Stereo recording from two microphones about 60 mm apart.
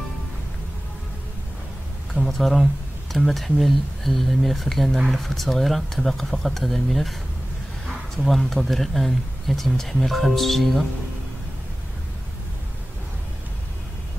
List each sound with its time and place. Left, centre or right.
2.1 s speech: centre
8.2 s speech: centre